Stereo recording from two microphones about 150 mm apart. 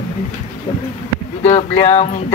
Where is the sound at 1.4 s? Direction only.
45° left (ahead or behind).